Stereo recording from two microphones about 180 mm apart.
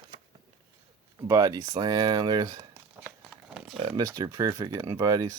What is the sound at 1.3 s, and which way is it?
Speech, 20° right (ahead or behind).